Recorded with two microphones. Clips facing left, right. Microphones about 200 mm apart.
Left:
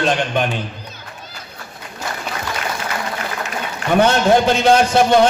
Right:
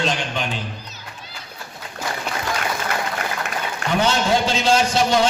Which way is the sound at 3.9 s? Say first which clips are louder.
Left 6 dB; 55° left (ahead or behind).